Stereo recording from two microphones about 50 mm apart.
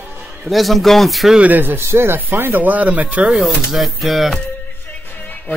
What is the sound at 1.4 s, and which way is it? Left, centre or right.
Speech, right.